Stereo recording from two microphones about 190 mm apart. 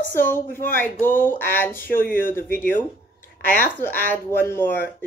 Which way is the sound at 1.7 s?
45° left (ahead or behind).